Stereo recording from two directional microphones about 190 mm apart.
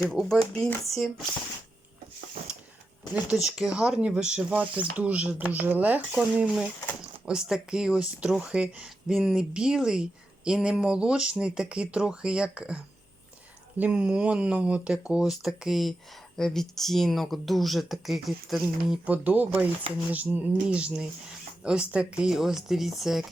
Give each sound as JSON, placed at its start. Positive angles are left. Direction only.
{"t": 0.1, "sound": "speech", "side_deg": 0}
{"t": 3.4, "sound": "speech", "side_deg": -5}